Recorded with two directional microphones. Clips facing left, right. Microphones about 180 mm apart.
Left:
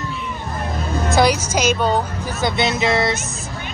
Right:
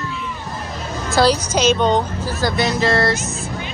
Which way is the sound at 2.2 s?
20° left (ahead or behind).